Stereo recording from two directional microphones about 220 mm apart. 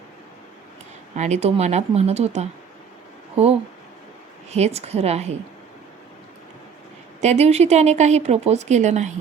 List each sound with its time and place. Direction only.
1.1 s speech: 30° right (ahead or behind)
7.2 s speech: 30° right (ahead or behind)